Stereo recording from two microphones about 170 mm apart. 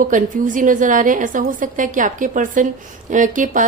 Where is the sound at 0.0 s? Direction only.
50° right (ahead or behind).